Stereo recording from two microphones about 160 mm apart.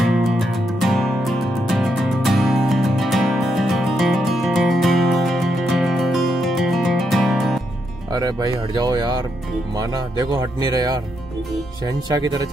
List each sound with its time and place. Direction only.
0.0 s music: 5° right (ahead or behind)
8.1 s speech: 25° right (ahead or behind)